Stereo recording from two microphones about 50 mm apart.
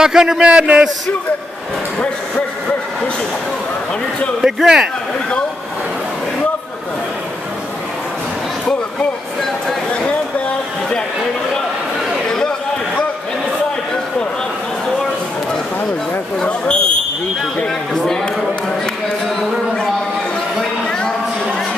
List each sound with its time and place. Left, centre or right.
0.0 s a man's voice: centre
4.4 s a man's voice: centre
16.3 s fire alarm: centre